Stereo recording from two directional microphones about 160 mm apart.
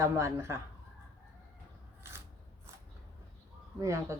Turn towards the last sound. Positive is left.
turn(degrees=-20)  # may be behind; listen again after turning